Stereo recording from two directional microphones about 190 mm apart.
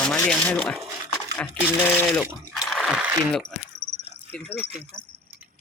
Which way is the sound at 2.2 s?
Centre (ahead or behind).